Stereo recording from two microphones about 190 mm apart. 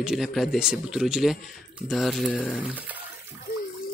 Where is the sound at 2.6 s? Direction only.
10° right (ahead or behind).